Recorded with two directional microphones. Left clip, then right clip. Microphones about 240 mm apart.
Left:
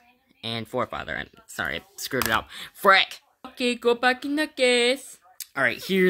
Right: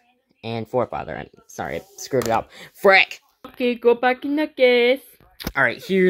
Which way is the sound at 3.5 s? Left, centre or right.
Centre.